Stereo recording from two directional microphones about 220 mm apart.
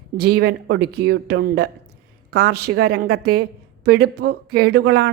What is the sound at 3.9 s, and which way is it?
Speech, 90° right.